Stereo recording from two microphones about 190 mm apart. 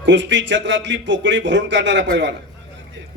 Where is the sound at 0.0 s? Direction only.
70° right (ahead or behind).